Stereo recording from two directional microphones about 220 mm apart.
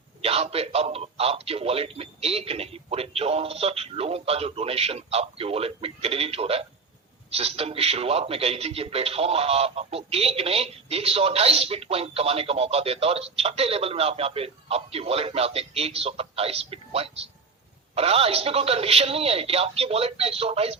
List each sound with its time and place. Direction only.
0.2 s a man's voice: 25° right (ahead or behind)